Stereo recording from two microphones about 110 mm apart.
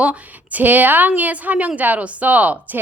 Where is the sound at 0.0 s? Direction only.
15° right (ahead or behind).